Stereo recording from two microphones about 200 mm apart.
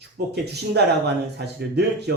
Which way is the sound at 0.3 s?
55° right (ahead or behind).